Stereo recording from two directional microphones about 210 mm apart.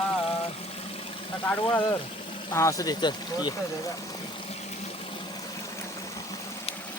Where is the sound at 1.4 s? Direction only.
10° left (ahead or behind).